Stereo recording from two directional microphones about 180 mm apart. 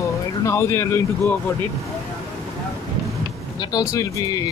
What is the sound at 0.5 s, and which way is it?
Speech, 15° left (ahead or behind).